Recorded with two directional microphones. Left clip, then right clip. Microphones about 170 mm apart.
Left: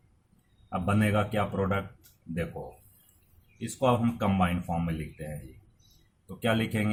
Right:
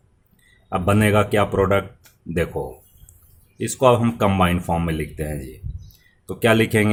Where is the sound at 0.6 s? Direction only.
60° right (ahead or behind).